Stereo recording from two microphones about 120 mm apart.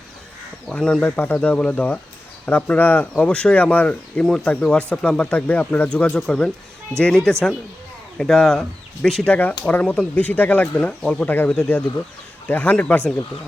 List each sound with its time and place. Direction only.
0.7 s speech: 5° left (ahead or behind)